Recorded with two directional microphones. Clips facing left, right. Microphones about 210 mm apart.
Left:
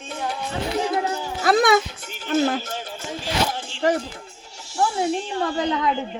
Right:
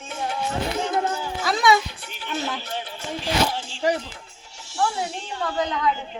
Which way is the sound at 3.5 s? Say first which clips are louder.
Left 2 dB; 55° left (ahead or behind).